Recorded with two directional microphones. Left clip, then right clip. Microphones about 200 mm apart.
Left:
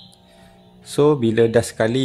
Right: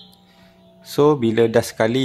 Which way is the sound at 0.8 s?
5° right (ahead or behind).